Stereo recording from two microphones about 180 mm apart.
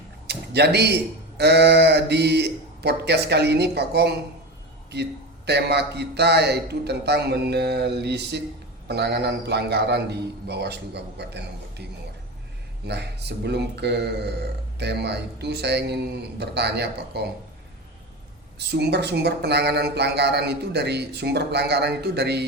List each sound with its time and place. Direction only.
0.3 s a sound: 65° right (ahead or behind)
1.4 s speech: 70° right (ahead or behind)
5.5 s speech: 70° right (ahead or behind)
12.9 s speech: 70° right (ahead or behind)
18.7 s speech: 65° right (ahead or behind)